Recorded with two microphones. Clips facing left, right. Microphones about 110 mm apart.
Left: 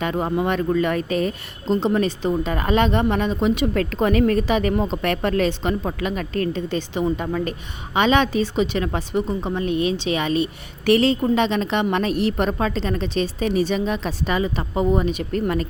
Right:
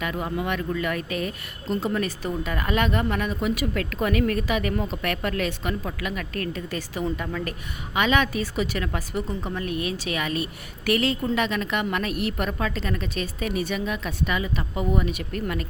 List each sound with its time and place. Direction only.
0.0 s speech: 35° left (ahead or behind)